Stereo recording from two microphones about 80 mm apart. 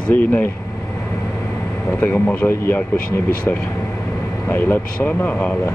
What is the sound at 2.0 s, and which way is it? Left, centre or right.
Speech, left.